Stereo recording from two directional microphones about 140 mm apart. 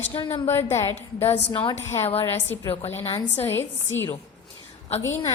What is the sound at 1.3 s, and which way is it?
Speech, 40° left (ahead or behind).